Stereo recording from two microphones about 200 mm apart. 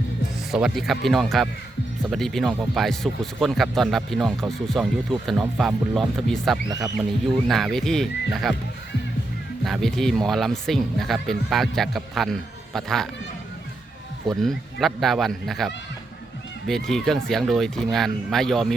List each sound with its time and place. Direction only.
0.5 s speech: centre (ahead or behind)
6.7 s speech: 15° right (ahead or behind)
7.3 s speech: centre (ahead or behind)
9.6 s speech: centre (ahead or behind)
14.3 s speech: centre (ahead or behind)